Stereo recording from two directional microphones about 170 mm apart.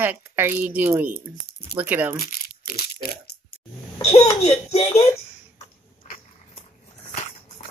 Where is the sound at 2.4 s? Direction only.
60° left (ahead or behind).